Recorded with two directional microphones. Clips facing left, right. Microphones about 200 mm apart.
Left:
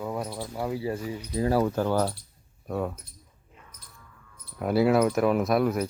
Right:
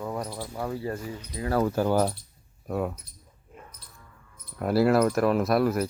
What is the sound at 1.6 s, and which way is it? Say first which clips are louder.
Speech: right 1 dB; 10° right (ahead or behind).